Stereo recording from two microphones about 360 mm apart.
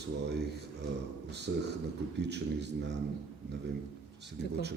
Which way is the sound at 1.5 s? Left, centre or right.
Right.